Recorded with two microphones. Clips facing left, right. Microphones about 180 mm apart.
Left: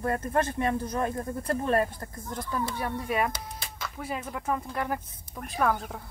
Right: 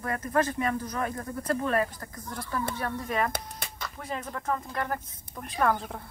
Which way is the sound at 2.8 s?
10° left (ahead or behind).